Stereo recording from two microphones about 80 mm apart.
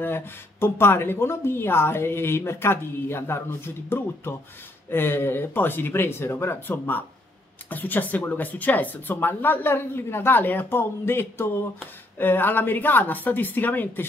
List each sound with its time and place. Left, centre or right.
0.0 s a woman's voice: left